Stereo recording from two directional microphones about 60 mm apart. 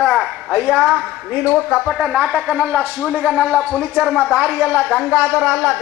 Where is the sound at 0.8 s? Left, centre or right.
Centre; by 3.1 s right.